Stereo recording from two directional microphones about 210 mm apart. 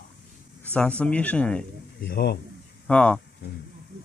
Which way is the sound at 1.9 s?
50° left (ahead or behind).